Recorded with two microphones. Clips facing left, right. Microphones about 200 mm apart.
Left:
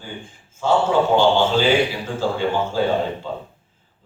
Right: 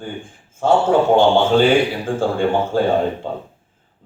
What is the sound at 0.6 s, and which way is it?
A man's voice, 55° right (ahead or behind).